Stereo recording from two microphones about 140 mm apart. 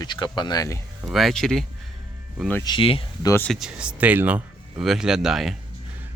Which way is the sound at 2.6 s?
35° left (ahead or behind).